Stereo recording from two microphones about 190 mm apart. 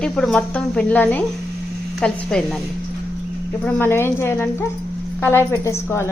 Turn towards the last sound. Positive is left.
turn(degrees=15)  # may be behind; listen again after turning